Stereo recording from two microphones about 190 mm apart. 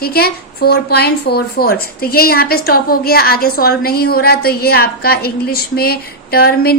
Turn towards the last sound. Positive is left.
turn(degrees=55)  # may be behind; listen again after turning